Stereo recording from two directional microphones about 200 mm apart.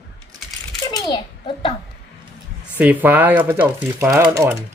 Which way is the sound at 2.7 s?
10° right (ahead or behind).